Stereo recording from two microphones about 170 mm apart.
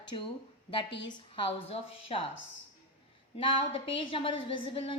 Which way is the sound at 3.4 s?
30° left (ahead or behind).